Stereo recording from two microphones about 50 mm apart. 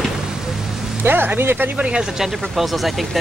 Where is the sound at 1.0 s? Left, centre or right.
Right.